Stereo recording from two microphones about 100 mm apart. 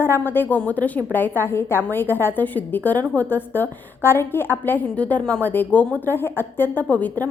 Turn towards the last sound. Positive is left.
turn(degrees=15)  # may be behind; listen again after turning